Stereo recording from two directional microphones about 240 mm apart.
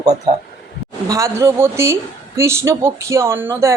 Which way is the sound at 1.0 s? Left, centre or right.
Centre.